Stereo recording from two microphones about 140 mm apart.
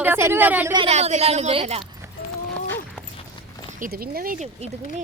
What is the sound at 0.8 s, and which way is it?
A woman's voice, 50° right (ahead or behind).